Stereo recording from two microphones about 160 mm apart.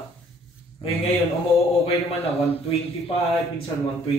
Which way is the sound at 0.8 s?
35° left (ahead or behind).